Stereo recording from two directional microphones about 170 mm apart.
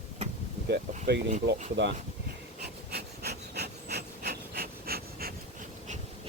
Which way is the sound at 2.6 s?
70° right (ahead or behind).